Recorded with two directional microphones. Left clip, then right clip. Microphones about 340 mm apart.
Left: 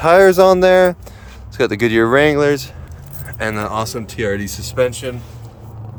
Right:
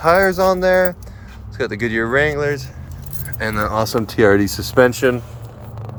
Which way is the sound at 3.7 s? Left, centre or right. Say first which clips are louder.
Right 5 dB; centre.